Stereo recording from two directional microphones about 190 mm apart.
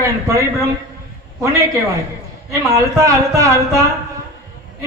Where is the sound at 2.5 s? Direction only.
15° right (ahead or behind).